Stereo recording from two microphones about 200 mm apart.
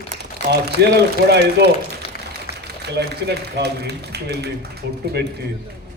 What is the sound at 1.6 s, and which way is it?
Speech, 60° right (ahead or behind).